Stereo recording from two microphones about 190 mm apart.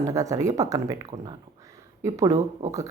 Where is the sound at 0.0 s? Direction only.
15° right (ahead or behind).